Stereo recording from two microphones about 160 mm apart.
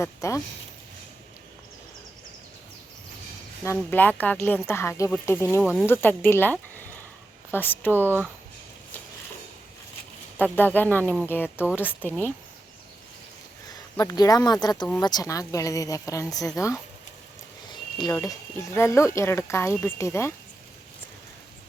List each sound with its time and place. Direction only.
0.0 s speech: 20° left (ahead or behind)
3.6 s speech: 15° left (ahead or behind)
7.9 s speech: 15° right (ahead or behind)
10.3 s speech: 10° left (ahead or behind)
11.6 s speech: 10° right (ahead or behind)
13.9 s a woman's voice: 20° left (ahead or behind)
17.7 s speech: 25° left (ahead or behind)